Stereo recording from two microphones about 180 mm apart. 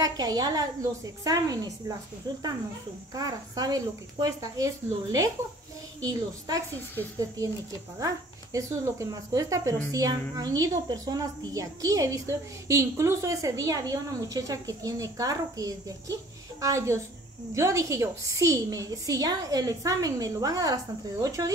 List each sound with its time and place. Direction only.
0.0 s a woman's voice: 20° right (ahead or behind)
3.2 s a woman's voice: 20° right (ahead or behind)
8.5 s a woman's voice: 15° right (ahead or behind)